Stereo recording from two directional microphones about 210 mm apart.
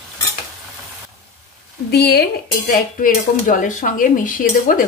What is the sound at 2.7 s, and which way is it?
A woman's voice, 40° left (ahead or behind).